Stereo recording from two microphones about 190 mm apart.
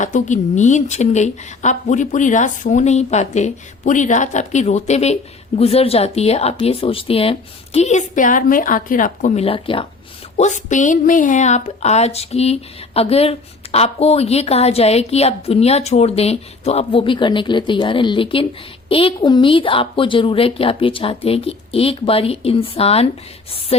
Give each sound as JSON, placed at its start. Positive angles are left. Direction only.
{"t": 0.0, "sound": "a woman's voice", "side_deg": 40}